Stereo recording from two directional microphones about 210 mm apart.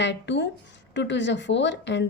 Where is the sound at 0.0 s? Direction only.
55° left (ahead or behind).